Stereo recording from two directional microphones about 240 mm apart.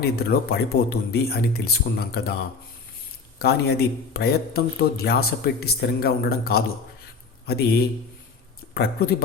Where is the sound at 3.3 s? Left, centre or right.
Left.